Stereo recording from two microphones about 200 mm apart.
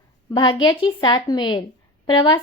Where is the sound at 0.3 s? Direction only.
20° left (ahead or behind).